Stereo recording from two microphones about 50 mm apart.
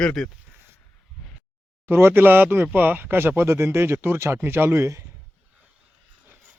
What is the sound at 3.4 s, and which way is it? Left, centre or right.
Speech, right.